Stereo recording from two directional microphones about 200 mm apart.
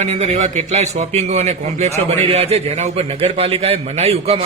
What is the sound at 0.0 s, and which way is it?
A man's voice, 35° right (ahead or behind).